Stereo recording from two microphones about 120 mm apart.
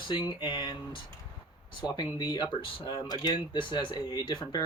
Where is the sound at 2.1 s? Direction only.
35° left (ahead or behind).